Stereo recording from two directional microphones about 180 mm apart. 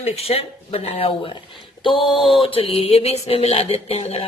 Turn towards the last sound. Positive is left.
turn(degrees=35)  # may be behind; listen again after turning